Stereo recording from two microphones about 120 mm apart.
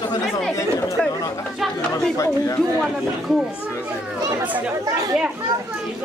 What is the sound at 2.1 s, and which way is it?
Speech, 25° left (ahead or behind).